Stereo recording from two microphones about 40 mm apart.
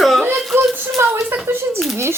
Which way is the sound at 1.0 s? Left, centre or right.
Right.